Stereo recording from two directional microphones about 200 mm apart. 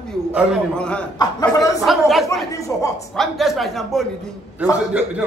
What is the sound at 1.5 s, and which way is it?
Speech, 20° left (ahead or behind).